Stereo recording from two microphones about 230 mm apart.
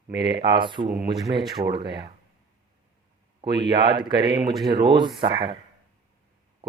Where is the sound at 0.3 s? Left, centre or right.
Right.